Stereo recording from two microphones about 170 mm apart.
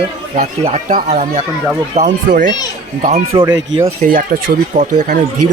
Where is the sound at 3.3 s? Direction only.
30° right (ahead or behind).